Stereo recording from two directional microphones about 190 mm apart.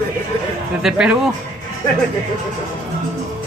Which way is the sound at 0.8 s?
5° right (ahead or behind).